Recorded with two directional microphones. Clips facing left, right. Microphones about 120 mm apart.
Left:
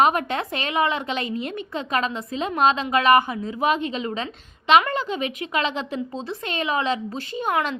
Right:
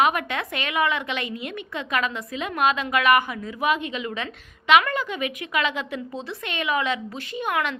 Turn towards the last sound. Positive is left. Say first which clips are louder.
# left 2 dB
turn(degrees=30)  # may be behind; listen again after turning